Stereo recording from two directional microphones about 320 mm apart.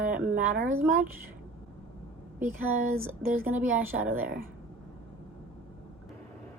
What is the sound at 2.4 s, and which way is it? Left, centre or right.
Speech, centre.